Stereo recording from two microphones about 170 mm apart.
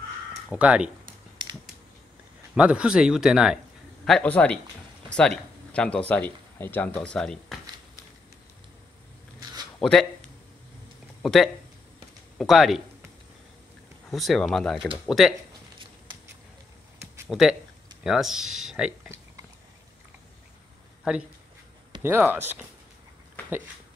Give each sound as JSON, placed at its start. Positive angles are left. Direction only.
{"t": 0.5, "sound": "speech", "side_deg": -5}
{"t": 1.4, "sound": "mechanisms", "side_deg": -25}
{"t": 2.5, "sound": "speech", "side_deg": -5}
{"t": 9.8, "sound": "speech", "side_deg": 5}
{"t": 11.2, "sound": "speech", "side_deg": 0}
{"t": 14.1, "sound": "speech", "side_deg": 0}
{"t": 17.3, "sound": "speech", "side_deg": 0}
{"t": 22.0, "sound": "speech", "side_deg": -10}